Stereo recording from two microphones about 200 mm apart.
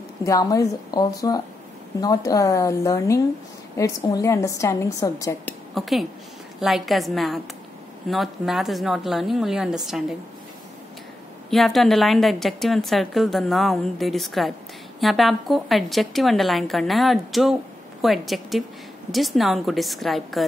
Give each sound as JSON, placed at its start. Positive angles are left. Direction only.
{"t": 0.2, "sound": "a woman's voice", "side_deg": 15}
{"t": 5.8, "sound": "a woman's voice", "side_deg": 0}
{"t": 11.5, "sound": "a woman's voice", "side_deg": 0}